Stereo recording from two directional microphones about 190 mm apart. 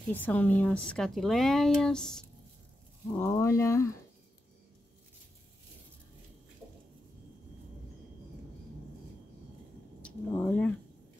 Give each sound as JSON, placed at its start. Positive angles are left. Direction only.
{"t": 0.1, "sound": "speech", "side_deg": 10}
{"t": 3.1, "sound": "speech", "side_deg": 15}
{"t": 10.0, "sound": "speech", "side_deg": 10}